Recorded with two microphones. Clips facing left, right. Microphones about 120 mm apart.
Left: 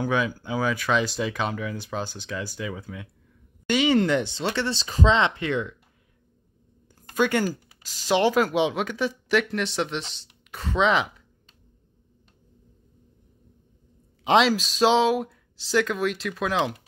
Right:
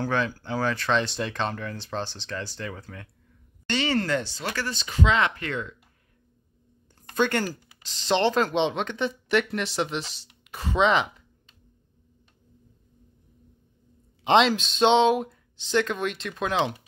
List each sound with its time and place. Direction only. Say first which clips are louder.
0.0 s speech: left 2 dB; 10° left (ahead or behind)
7.0 s speech: left 2 dB; 10° left (ahead or behind)
14.2 s speech: even; 5° left (ahead or behind)